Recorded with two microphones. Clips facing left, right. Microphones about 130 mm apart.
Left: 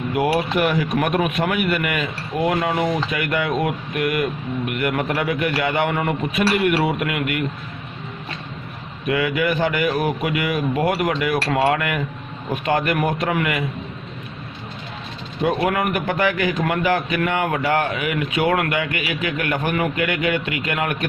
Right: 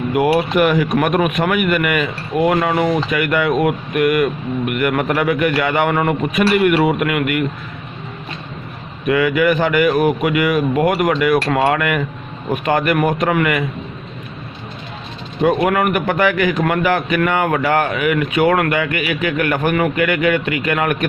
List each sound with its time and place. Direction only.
0.1 s speech: 65° right (ahead or behind)
9.0 s speech: 60° right (ahead or behind)
15.4 s speech: 60° right (ahead or behind)